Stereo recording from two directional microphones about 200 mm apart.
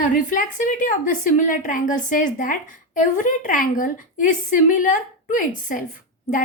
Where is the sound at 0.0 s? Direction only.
40° left (ahead or behind).